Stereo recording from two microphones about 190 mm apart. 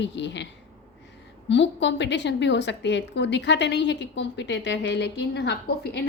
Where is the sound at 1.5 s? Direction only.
70° left (ahead or behind).